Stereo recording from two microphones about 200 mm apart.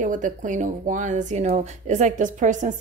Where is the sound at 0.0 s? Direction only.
40° right (ahead or behind).